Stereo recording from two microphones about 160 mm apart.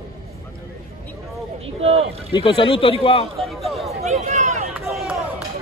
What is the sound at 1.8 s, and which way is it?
Speech, 40° right (ahead or behind).